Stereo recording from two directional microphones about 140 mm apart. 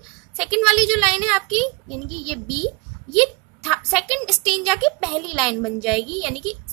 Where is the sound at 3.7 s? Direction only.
5° right (ahead or behind).